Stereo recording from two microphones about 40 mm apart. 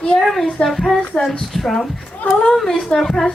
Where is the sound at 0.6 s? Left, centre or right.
Left.